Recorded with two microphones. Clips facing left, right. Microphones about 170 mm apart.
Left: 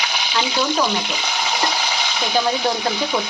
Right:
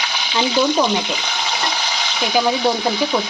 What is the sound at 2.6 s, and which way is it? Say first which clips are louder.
Speech: right 3 dB; 15° right (ahead or behind).